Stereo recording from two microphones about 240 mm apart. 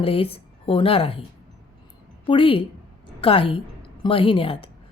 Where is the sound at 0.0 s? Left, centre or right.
Left.